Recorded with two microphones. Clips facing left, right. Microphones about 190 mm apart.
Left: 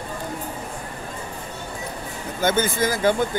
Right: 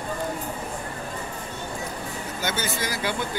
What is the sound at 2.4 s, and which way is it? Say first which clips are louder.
Speech: left 9 dB; 50° left (ahead or behind).